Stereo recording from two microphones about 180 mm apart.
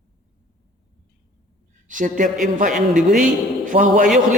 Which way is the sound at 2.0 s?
45° right (ahead or behind).